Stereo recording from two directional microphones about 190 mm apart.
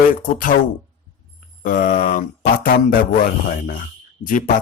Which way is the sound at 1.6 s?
45° left (ahead or behind).